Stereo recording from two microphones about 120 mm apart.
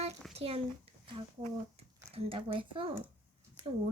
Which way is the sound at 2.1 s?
50° right (ahead or behind).